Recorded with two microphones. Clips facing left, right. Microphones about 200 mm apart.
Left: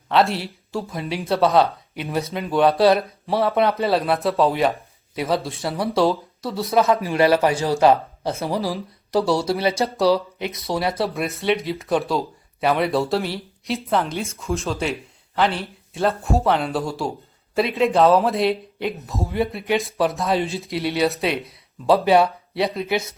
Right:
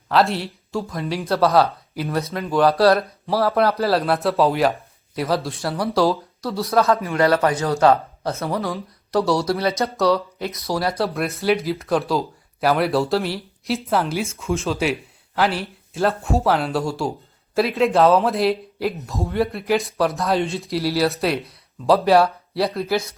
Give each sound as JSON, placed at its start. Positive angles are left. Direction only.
{"t": 0.1, "sound": "speech", "side_deg": 0}
{"t": 6.8, "sound": "speech", "side_deg": 20}
{"t": 10.3, "sound": "speech", "side_deg": 0}